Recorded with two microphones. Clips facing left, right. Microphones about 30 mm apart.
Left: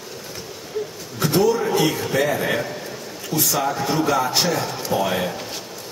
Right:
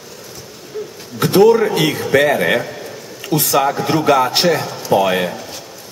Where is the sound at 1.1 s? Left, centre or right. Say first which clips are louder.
Right 8 dB; right.